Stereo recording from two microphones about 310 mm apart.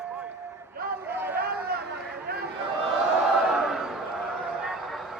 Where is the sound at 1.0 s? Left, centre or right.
Centre.